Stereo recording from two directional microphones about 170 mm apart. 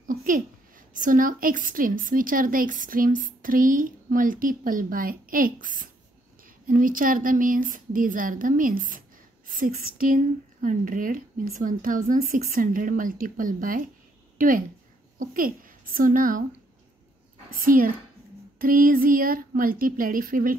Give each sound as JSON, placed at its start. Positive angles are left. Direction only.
{"t": 0.1, "sound": "a woman's voice", "side_deg": -55}
{"t": 15.1, "sound": "a woman's voice", "side_deg": -55}
{"t": 17.5, "sound": "speech", "side_deg": -55}